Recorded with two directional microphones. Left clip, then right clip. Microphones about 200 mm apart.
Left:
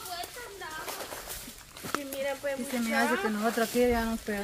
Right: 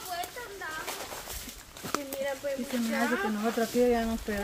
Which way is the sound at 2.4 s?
35° left (ahead or behind).